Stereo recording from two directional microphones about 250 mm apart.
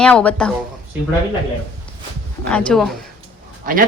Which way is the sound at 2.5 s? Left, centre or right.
Centre.